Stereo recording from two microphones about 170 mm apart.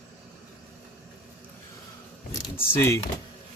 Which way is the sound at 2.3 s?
20° left (ahead or behind).